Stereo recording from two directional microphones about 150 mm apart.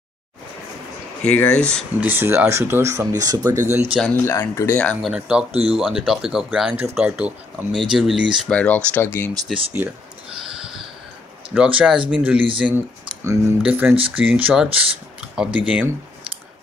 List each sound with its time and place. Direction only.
1.2 s speech: 10° left (ahead or behind)
2.0 s speech: 15° right (ahead or behind)
4.0 s speech: 15° left (ahead or behind)
5.0 s speech: 5° right (ahead or behind)
8.5 s speech: 10° left (ahead or behind)
9.5 s speech: 10° right (ahead or behind)
11.5 s speech: 10° right (ahead or behind)